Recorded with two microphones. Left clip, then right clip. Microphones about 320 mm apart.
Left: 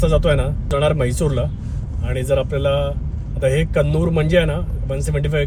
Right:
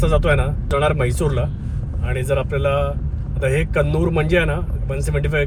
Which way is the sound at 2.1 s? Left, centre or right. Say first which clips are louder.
Left 2 dB; centre.